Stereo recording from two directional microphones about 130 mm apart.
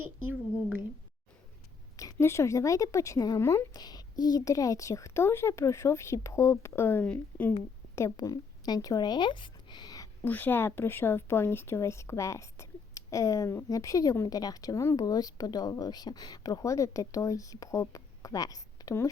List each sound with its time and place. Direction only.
2.1 s a woman's voice: 20° left (ahead or behind)
7.9 s speech: 25° left (ahead or behind)
10.2 s a woman's voice: 15° left (ahead or behind)